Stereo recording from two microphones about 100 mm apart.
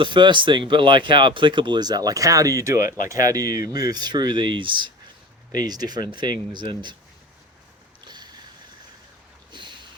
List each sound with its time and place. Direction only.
0.0 s speech: 50° right (ahead or behind)
5.6 s speech: 40° right (ahead or behind)
8.0 s boat: 45° right (ahead or behind)
9.5 s boat: 50° right (ahead or behind)